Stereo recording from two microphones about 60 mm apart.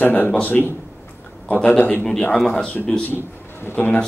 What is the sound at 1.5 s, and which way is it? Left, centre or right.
Speech, left.